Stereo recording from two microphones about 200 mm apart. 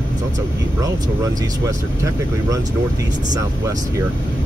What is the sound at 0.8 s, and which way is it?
Speech, 15° right (ahead or behind).